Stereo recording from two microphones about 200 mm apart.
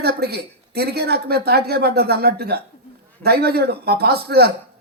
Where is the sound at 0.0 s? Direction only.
55° right (ahead or behind).